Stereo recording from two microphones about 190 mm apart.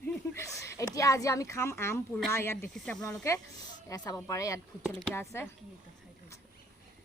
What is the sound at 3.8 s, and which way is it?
A woman's voice, 20° left (ahead or behind).